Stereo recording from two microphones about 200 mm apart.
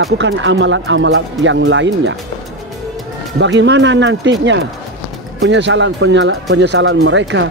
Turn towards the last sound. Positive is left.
turn(degrees=-70)  # may be behind; listen again after turning